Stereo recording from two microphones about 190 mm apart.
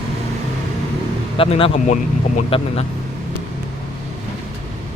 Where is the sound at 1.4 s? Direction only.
30° left (ahead or behind).